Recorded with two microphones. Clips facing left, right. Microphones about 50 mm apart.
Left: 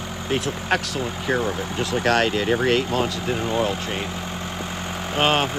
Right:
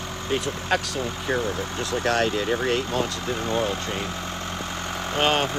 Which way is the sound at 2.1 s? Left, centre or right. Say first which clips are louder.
Left 3 dB; left.